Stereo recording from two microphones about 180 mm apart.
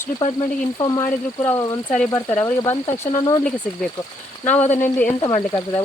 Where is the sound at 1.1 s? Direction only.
10° left (ahead or behind).